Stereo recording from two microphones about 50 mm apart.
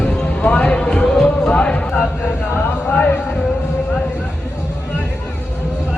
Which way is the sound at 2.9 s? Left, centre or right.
Left.